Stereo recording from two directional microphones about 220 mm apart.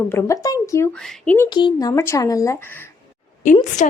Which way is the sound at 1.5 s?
20° left (ahead or behind).